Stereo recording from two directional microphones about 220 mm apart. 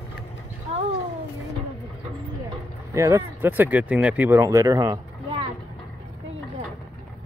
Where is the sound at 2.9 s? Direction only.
15° right (ahead or behind).